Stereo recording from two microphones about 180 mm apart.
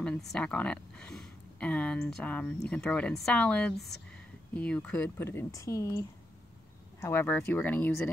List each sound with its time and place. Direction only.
0.0 s speech: 5° left (ahead or behind)